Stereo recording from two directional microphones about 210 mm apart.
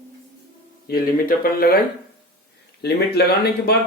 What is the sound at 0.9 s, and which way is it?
Speech, 45° left (ahead or behind).